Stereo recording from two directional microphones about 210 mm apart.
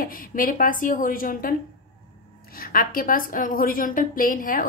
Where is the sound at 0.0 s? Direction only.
40° left (ahead or behind).